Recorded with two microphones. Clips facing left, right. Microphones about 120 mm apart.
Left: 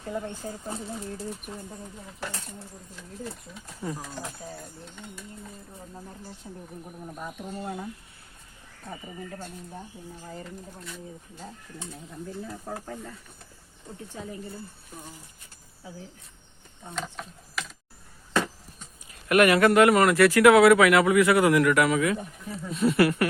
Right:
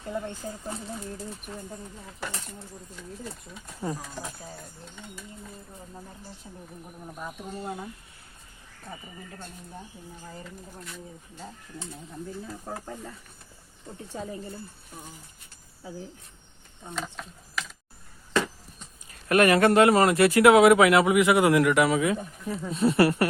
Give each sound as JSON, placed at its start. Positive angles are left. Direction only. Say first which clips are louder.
{"t": 16.9, "sound": "speech", "louder": "even", "side_deg": 0}
{"t": 19.3, "sound": "speech", "louder": "even", "side_deg": -35}